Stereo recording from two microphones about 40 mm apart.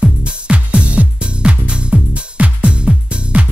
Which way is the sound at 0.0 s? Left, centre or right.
Right.